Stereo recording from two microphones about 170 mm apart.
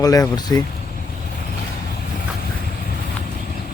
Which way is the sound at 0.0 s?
20° left (ahead or behind).